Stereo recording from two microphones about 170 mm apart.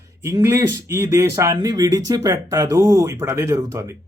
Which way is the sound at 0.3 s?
15° right (ahead or behind).